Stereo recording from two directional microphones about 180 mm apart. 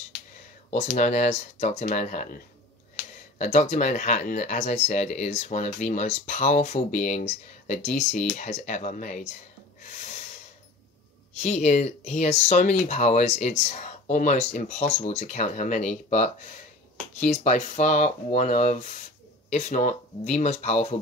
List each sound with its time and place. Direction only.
0.7 s speech: 45° left (ahead or behind)
11.3 s speech: 40° left (ahead or behind)
17.2 s speech: 40° left (ahead or behind)